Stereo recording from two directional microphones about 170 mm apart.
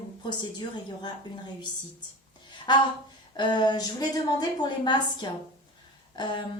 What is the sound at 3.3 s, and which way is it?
A woman's voice, 25° left (ahead or behind).